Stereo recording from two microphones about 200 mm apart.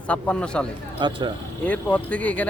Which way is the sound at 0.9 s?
25° right (ahead or behind).